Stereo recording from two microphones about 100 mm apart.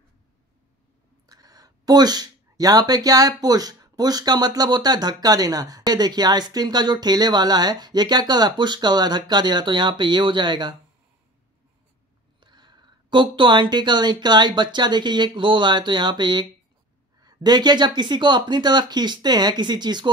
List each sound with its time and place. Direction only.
1.2 s speech: 40° right (ahead or behind)
12.4 s speech: 50° right (ahead or behind)